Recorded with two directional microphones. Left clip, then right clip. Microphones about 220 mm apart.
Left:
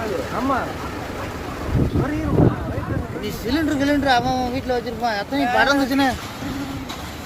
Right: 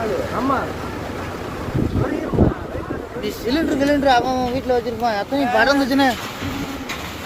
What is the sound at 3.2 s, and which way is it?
Speech, 5° left (ahead or behind).